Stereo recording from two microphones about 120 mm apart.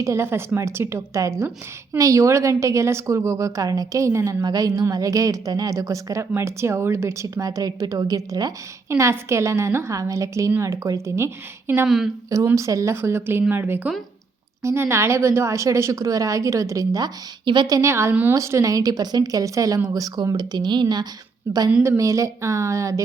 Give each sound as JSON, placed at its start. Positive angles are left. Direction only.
{"t": 0.0, "sound": "a woman's voice", "side_deg": -25}
{"t": 11.9, "sound": "a woman's voice", "side_deg": 0}
{"t": 12.5, "sound": "a woman's voice", "side_deg": -25}
{"t": 17.4, "sound": "speech", "side_deg": -40}
{"t": 17.7, "sound": "a woman's voice", "side_deg": -25}
{"t": 18.3, "sound": "speech", "side_deg": -25}
{"t": 21.5, "sound": "a woman's voice", "side_deg": -20}